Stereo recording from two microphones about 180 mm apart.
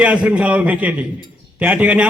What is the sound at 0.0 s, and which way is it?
A man's voice, 5° right (ahead or behind).